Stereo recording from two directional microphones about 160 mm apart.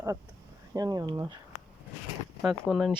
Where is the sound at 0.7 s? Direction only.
25° right (ahead or behind).